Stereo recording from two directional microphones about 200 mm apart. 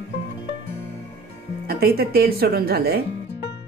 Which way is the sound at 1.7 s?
50° right (ahead or behind).